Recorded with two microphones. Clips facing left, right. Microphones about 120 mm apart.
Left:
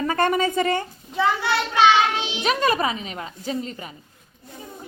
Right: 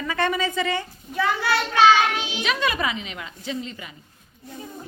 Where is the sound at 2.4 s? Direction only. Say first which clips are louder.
Left 4 dB; 40° left (ahead or behind).